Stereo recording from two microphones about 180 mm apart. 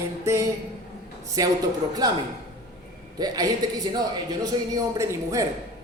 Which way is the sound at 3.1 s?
20° right (ahead or behind).